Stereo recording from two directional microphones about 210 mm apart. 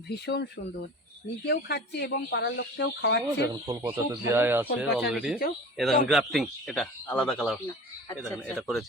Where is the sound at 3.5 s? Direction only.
15° right (ahead or behind).